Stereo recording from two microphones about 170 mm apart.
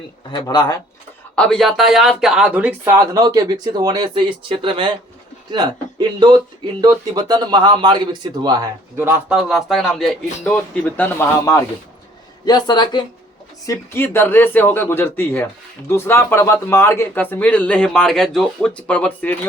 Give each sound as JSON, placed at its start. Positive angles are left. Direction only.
{"t": 0.3, "sound": "speech", "side_deg": 25}
{"t": 1.4, "sound": "speech", "side_deg": 5}
{"t": 9.0, "sound": "speech", "side_deg": -15}
{"t": 9.4, "sound": "speech", "side_deg": 0}
{"t": 13.7, "sound": "speech", "side_deg": 15}